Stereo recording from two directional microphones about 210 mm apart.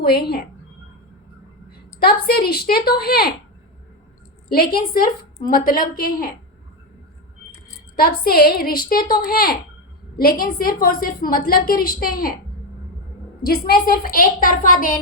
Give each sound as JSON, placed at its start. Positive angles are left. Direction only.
{"t": 0.0, "sound": "a woman's voice", "side_deg": 50}
{"t": 2.0, "sound": "a woman's voice", "side_deg": 50}
{"t": 4.4, "sound": "a woman's voice", "side_deg": 45}
{"t": 7.9, "sound": "a woman's voice", "side_deg": 45}
{"t": 13.4, "sound": "a woman's voice", "side_deg": 45}